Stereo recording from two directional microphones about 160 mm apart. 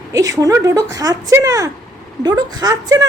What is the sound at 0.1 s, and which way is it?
A woman's voice, 20° right (ahead or behind).